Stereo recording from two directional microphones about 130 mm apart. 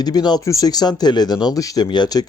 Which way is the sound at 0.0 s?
30° left (ahead or behind).